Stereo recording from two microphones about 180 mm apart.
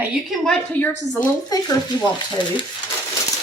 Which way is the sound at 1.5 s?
20° left (ahead or behind).